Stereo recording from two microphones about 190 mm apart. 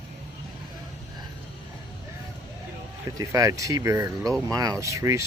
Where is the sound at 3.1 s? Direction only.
15° right (ahead or behind).